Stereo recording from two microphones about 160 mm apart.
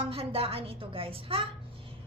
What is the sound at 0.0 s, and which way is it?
A woman's voice, 35° right (ahead or behind).